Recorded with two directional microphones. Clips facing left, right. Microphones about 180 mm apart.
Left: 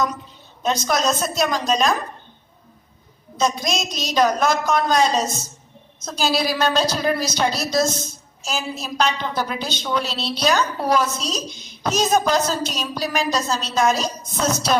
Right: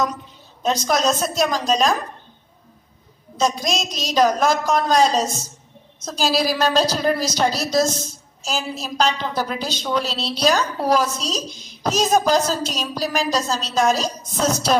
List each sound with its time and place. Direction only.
0.6 s a woman's voice: 35° right (ahead or behind)
3.3 s a woman's voice: 35° right (ahead or behind)